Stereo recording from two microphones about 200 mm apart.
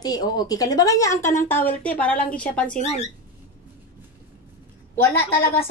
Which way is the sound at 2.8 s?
35° left (ahead or behind).